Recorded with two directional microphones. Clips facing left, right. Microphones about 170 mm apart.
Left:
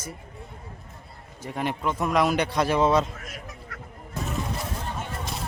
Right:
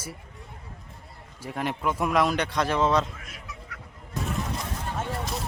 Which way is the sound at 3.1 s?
45° left (ahead or behind).